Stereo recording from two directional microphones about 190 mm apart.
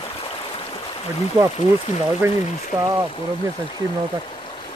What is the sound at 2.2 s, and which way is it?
Speech, 15° right (ahead or behind).